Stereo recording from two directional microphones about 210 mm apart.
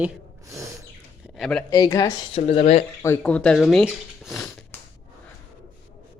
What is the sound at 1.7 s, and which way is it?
Speech, 15° left (ahead or behind).